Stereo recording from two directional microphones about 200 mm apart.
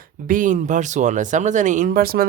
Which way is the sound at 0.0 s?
40° right (ahead or behind).